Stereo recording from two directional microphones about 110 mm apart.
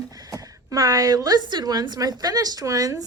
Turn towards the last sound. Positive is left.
turn(degrees=-35)  # may be behind; listen again after turning